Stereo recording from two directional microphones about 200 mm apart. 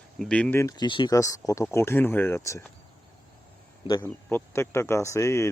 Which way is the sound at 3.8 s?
10° left (ahead or behind).